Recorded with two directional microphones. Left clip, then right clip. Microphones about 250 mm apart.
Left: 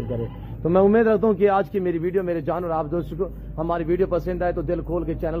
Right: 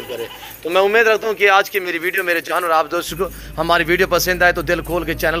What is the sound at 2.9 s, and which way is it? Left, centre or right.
Speech, centre.